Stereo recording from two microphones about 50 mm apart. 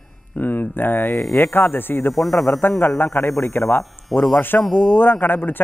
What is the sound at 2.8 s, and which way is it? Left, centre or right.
A man's voice, left.